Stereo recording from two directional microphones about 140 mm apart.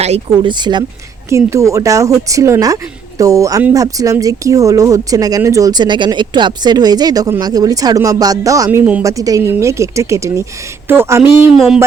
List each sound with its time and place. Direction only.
0.0 s speech: 50° right (ahead or behind)
0.4 s speech: 35° right (ahead or behind)
1.3 s speech: 20° right (ahead or behind)